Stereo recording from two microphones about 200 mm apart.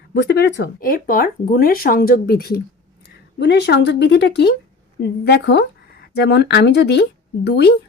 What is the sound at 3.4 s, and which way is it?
Speech, 60° left (ahead or behind).